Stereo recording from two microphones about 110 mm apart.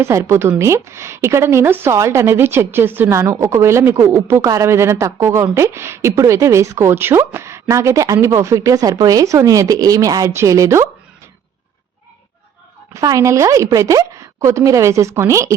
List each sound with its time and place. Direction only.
0.0 s a woman's voice: 25° right (ahead or behind)
12.9 s a woman's voice: 30° right (ahead or behind)